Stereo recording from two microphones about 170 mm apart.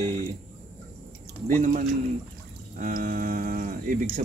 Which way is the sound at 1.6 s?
50° right (ahead or behind).